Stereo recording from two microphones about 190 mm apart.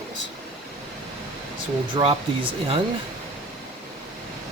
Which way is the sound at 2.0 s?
20° right (ahead or behind).